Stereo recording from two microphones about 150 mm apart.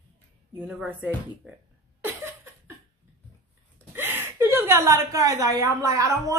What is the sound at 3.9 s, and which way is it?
A woman's voice, 15° right (ahead or behind).